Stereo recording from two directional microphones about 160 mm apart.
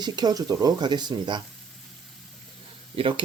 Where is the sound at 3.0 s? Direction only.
35° right (ahead or behind).